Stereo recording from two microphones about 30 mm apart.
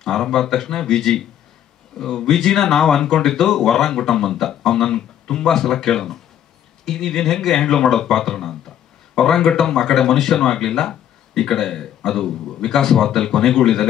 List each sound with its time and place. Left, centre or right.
0.0 s speech: centre